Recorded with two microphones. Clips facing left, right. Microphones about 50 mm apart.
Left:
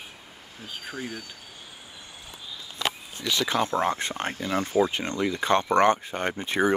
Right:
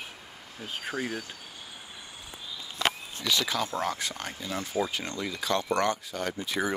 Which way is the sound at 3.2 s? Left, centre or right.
Left.